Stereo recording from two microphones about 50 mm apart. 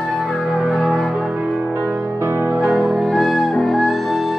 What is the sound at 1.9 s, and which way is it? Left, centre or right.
Music, centre.